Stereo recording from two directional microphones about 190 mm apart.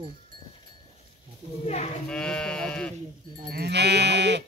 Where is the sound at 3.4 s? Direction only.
55° right (ahead or behind).